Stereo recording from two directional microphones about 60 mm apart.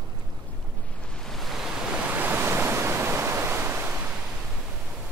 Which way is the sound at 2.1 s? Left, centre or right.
Right.